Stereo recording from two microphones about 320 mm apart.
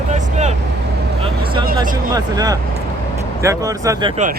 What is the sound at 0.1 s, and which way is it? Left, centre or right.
Vehicle, right.